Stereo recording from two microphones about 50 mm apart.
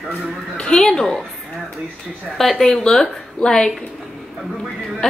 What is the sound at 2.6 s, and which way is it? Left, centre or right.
A woman's voice, centre.